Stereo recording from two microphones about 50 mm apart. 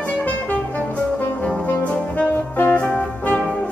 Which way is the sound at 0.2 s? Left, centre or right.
Left.